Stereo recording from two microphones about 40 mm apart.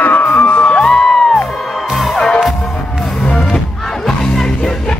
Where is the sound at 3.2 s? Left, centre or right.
Centre.